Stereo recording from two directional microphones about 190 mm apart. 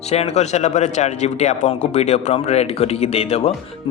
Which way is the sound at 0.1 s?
35° left (ahead or behind).